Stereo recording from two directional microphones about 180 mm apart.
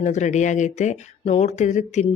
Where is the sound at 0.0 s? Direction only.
40° left (ahead or behind).